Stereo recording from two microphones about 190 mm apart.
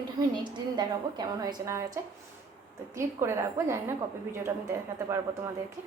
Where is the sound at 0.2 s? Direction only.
20° right (ahead or behind).